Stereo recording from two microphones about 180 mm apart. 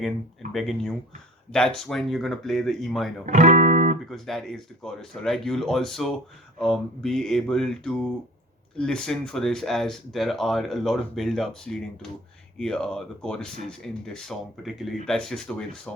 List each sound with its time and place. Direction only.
0.5 s speech: centre (ahead or behind)
3.2 s music: 45° right (ahead or behind)
4.1 s speech: centre (ahead or behind)